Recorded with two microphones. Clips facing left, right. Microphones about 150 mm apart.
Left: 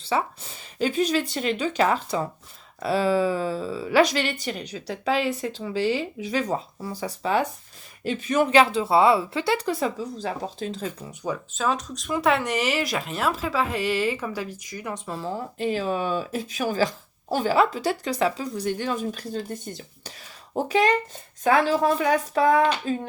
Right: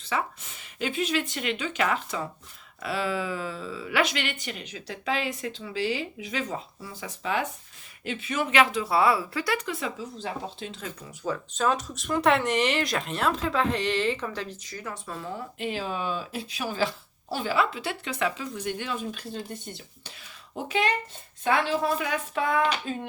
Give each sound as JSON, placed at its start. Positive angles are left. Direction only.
{"t": 0.0, "sound": "speech", "side_deg": 30}
{"t": 11.5, "sound": "speech", "side_deg": 0}